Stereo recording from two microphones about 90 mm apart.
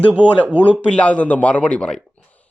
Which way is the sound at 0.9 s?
15° left (ahead or behind).